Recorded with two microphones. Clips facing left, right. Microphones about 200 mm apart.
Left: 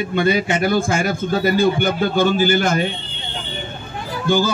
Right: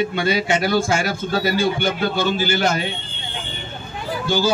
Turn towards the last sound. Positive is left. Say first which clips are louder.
# left 2 dB
turn(degrees=50)  # may be behind; listen again after turning